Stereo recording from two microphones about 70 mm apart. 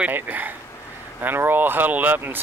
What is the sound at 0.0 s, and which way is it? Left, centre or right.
Speech, right.